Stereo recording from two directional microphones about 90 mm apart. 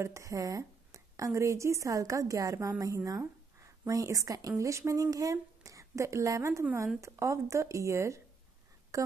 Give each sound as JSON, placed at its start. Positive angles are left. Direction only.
{"t": 0.0, "sound": "a woman's voice", "side_deg": -35}